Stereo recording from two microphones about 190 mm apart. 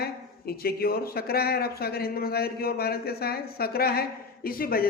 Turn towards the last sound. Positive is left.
turn(degrees=50)  # may be behind; listen again after turning